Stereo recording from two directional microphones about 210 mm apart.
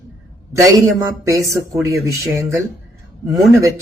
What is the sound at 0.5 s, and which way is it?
Speech, 15° right (ahead or behind).